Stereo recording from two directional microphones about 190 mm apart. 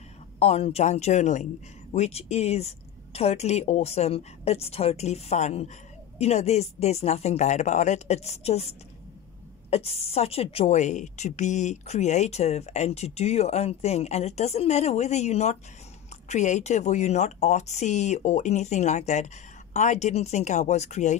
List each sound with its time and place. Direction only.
0.4 s a woman's voice: 35° left (ahead or behind)